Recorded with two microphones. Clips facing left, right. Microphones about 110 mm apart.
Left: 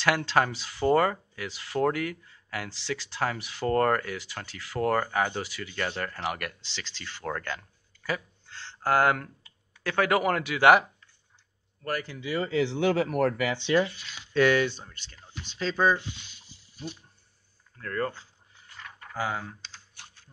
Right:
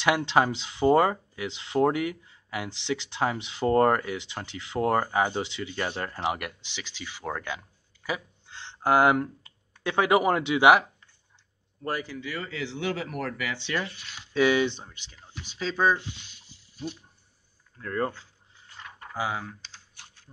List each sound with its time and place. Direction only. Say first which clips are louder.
0.0 s speech: right 2 dB; 20° right (ahead or behind)
12.2 s speech: left 5 dB; 20° left (ahead or behind)
12.4 s speech: left 8 dB; 30° left (ahead or behind)
13.6 s speech: left 9 dB; 20° left (ahead or behind)
14.3 s speech: even; 10° right (ahead or behind)
17.7 s speech: right 2 dB; 15° right (ahead or behind)
19.1 s speech: right 1 dB; 5° right (ahead or behind)